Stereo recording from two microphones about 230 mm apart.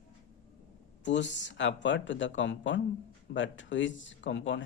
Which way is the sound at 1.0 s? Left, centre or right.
Left.